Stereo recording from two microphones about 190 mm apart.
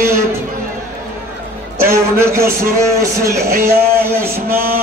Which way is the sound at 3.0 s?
15° right (ahead or behind).